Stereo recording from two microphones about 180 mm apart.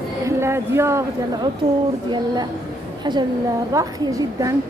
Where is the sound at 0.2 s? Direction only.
15° right (ahead or behind).